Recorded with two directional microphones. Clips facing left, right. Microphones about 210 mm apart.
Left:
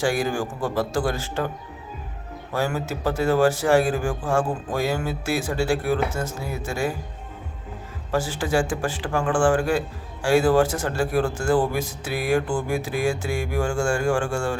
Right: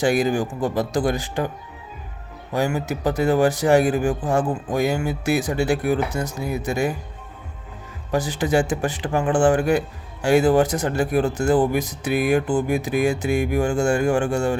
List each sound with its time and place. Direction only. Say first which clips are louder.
0.0 s speech: right 4 dB; 20° right (ahead or behind)
2.5 s speech: right 3 dB; 15° right (ahead or behind)
8.1 s speech: right 3 dB; 20° right (ahead or behind)